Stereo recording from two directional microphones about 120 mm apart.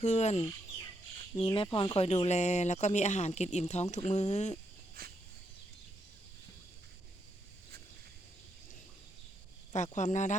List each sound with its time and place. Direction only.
0.0 s speech: 70° left (ahead or behind)
1.4 s speech: 45° left (ahead or behind)
2.0 s speech: 65° left (ahead or behind)
9.7 s speech: 90° left